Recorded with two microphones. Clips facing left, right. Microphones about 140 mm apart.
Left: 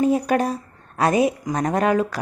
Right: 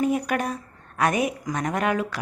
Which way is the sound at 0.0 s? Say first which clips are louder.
Left 5 dB; 30° left (ahead or behind).